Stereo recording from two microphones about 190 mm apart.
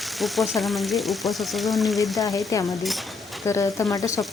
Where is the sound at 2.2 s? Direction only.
15° left (ahead or behind).